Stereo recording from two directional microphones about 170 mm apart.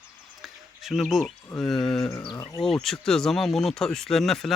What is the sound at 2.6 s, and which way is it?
Speech, centre (ahead or behind).